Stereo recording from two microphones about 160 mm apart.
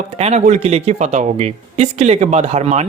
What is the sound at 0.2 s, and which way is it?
Speech, 45° right (ahead or behind).